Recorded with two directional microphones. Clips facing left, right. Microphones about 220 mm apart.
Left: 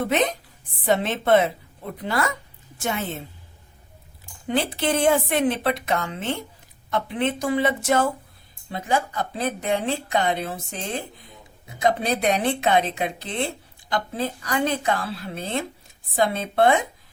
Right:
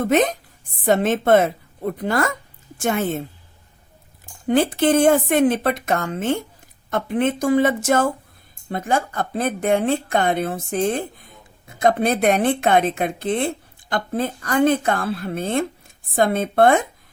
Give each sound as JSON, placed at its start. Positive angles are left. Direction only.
{"t": 0.0, "sound": "speech", "side_deg": -45}
{"t": 4.4, "sound": "speech", "side_deg": -50}